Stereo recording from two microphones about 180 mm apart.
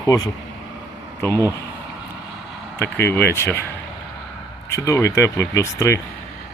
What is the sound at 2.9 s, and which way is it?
Speech, 10° left (ahead or behind).